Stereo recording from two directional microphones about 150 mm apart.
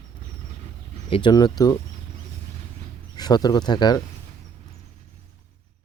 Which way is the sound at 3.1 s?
25° left (ahead or behind).